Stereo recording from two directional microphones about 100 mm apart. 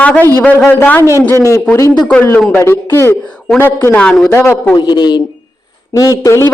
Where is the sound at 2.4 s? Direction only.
15° left (ahead or behind).